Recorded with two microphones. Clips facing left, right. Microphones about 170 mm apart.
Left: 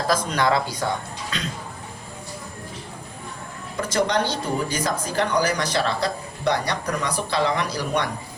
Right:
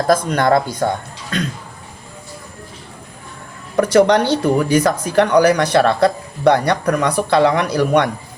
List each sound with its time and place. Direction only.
0.1 s speech: 55° right (ahead or behind)
3.8 s speech: 65° right (ahead or behind)